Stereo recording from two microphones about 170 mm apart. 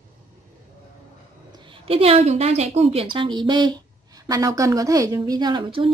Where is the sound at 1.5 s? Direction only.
30° right (ahead or behind).